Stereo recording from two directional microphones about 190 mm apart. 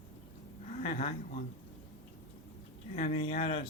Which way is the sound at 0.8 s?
30° left (ahead or behind).